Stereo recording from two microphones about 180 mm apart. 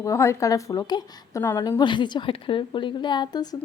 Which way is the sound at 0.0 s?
15° left (ahead or behind).